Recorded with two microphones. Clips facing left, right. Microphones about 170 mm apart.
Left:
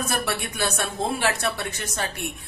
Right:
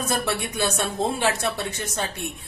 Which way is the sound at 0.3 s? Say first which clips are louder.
Right 2 dB; 20° right (ahead or behind).